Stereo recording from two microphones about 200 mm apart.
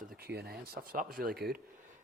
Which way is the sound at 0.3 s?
50° right (ahead or behind).